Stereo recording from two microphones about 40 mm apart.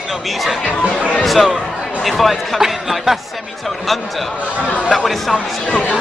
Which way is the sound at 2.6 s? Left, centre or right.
Centre.